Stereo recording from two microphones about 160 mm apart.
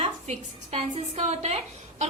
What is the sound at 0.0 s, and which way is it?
A woman's voice, 40° right (ahead or behind).